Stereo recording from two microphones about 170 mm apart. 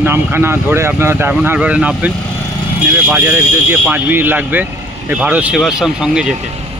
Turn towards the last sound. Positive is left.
turn(degrees=-5)  # may be behind; listen again after turning